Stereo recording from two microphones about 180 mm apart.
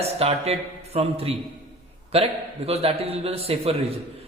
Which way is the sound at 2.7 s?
35° right (ahead or behind).